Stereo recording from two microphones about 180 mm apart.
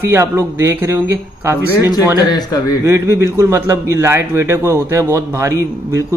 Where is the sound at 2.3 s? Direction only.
20° left (ahead or behind).